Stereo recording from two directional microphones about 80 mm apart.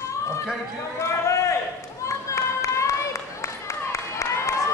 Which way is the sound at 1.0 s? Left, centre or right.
Left.